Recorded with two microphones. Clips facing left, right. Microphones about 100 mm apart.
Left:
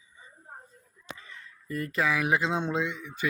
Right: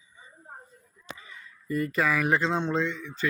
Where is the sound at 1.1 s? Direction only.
10° right (ahead or behind).